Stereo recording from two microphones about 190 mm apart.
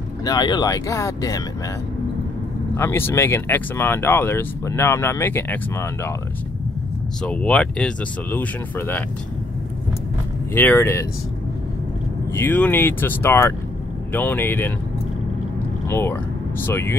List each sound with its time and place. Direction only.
0.2 s speech: 20° left (ahead or behind)
2.7 s speech: 15° left (ahead or behind)
7.2 s speech: 5° left (ahead or behind)
10.5 s speech: 10° left (ahead or behind)
12.3 s speech: 10° left (ahead or behind)
15.9 s speech: 10° left (ahead or behind)